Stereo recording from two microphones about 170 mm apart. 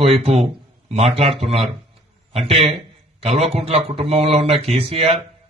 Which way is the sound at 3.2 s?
40° right (ahead or behind).